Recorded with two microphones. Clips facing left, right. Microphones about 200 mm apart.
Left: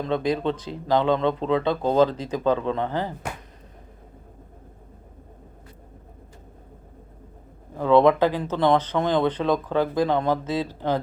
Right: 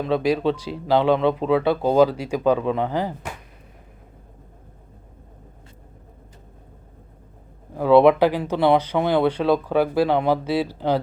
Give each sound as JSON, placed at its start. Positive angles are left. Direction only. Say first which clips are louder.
{"t": 0.0, "sound": "speech", "louder": "right 3 dB", "side_deg": -10}
{"t": 7.8, "sound": "speech", "louder": "right 3 dB", "side_deg": -10}